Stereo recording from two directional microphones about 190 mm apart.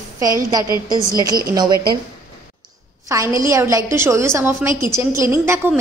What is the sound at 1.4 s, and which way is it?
Speech, 20° right (ahead or behind).